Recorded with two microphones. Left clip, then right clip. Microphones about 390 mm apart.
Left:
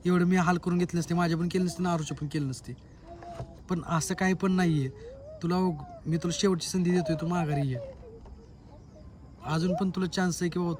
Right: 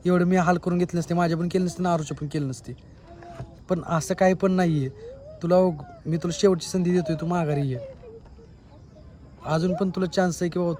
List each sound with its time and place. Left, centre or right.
0.1 s a man's voice: centre
3.1 s a sound: left
3.7 s a man's voice: centre
9.4 s a man's voice: centre